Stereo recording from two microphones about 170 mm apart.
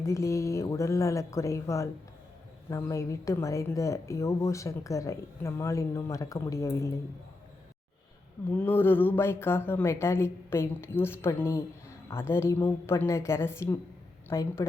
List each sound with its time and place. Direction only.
0.0 s a woman's voice: 20° left (ahead or behind)
8.4 s a woman's voice: 10° left (ahead or behind)